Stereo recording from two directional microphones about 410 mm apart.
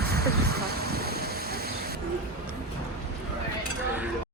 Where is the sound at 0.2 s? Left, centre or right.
Right.